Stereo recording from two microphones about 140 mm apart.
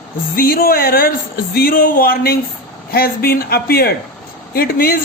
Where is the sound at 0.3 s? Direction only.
90° left.